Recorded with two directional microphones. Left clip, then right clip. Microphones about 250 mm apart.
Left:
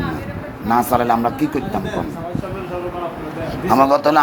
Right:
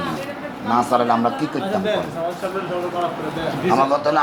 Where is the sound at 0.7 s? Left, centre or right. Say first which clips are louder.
Left 2 dB; left.